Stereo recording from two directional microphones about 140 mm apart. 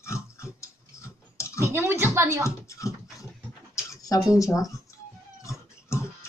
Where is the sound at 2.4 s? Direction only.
20° left (ahead or behind).